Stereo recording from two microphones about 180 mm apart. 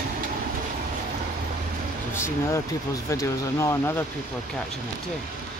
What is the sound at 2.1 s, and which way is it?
Speech, 15° left (ahead or behind).